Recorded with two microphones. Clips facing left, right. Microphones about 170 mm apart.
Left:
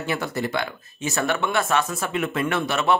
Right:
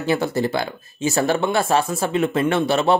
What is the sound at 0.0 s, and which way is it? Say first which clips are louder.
Speech: right 6 dB; 30° right (ahead or behind).